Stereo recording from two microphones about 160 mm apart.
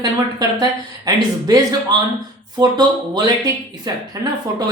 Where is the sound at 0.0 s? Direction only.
25° right (ahead or behind).